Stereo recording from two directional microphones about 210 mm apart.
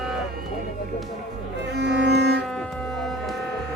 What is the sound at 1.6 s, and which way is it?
Music, 55° right (ahead or behind).